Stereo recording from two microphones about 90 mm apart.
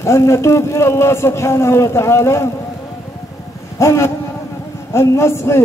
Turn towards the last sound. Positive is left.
turn(degrees=30)  # may be behind; listen again after turning